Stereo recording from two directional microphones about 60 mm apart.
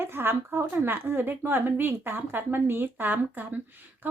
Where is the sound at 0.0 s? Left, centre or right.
Right.